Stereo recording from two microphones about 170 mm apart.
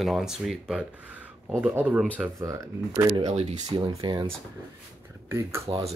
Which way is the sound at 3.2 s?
40° right (ahead or behind).